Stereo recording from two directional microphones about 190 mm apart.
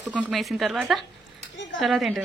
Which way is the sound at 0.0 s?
5° right (ahead or behind).